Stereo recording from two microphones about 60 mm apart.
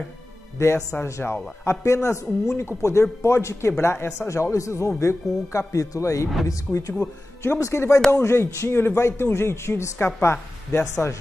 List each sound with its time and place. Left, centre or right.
0.6 s speech: left
7.6 s speech: left
10.0 s a woman's voice: left
10.8 s speech: left